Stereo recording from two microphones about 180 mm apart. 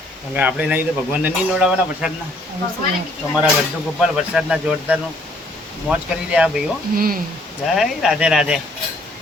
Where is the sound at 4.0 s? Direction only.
5° right (ahead or behind).